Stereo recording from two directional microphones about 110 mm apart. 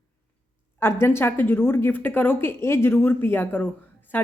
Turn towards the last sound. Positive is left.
turn(degrees=20)  # may be behind; listen again after turning